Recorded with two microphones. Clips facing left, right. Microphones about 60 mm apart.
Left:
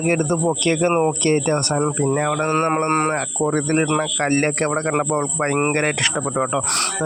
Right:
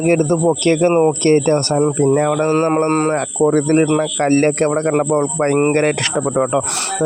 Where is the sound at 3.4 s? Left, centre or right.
Right.